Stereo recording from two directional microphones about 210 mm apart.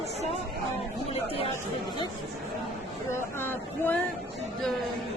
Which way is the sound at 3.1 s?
10° left (ahead or behind).